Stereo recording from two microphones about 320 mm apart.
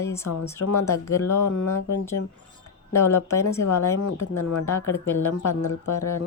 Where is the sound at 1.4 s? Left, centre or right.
Left.